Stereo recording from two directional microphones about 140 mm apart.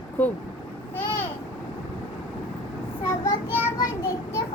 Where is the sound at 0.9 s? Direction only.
15° left (ahead or behind).